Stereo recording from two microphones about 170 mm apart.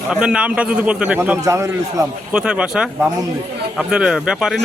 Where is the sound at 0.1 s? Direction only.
5° right (ahead or behind).